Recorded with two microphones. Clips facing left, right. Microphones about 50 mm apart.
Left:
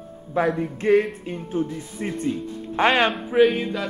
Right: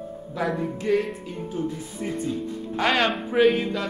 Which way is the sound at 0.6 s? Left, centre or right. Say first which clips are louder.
Left 4 dB; left.